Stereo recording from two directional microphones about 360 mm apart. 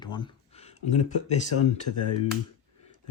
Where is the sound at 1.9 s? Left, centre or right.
Left.